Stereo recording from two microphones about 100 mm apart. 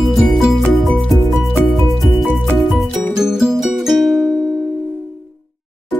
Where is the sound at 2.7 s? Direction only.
5° right (ahead or behind).